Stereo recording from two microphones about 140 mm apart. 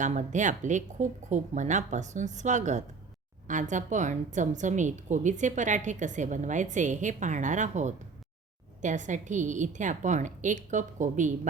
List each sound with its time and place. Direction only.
0.0 s a woman's voice: 60° right (ahead or behind)